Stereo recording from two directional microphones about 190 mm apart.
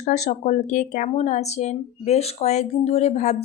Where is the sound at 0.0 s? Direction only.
40° left (ahead or behind).